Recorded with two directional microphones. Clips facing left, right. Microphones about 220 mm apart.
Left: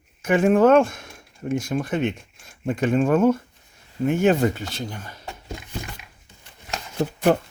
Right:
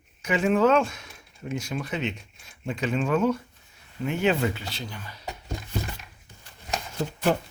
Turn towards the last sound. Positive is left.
turn(degrees=45)  # may be behind; listen again after turning